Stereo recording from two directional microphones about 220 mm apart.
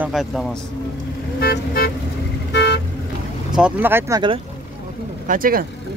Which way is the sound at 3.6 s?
5° right (ahead or behind).